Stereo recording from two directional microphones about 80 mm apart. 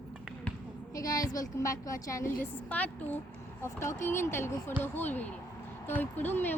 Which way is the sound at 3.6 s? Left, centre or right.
Left.